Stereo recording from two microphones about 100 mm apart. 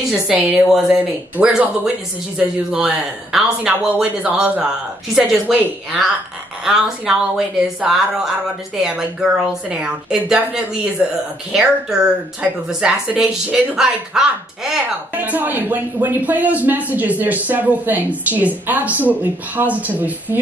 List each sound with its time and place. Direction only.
0.1 s a woman's voice: 15° right (ahead or behind)
15.1 s a woman's voice: 20° right (ahead or behind)